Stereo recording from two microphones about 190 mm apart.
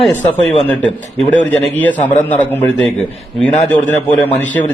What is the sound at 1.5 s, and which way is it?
Speech, 10° left (ahead or behind).